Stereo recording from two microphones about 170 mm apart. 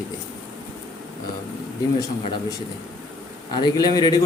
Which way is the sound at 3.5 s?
25° left (ahead or behind).